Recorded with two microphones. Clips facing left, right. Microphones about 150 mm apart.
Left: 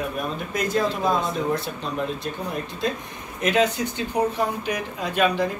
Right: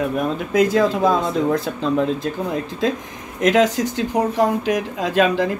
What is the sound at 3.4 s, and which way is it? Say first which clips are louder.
Speech: right 5 dB; 90° right.